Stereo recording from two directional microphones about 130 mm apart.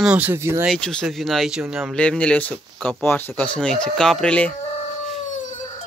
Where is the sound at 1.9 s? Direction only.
10° left (ahead or behind).